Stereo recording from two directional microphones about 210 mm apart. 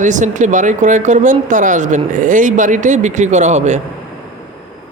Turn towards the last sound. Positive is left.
turn(degrees=-35)  # may be behind; listen again after turning